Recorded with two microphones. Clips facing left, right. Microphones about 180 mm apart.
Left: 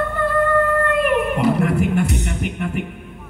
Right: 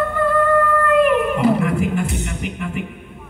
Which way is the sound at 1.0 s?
40° left (ahead or behind).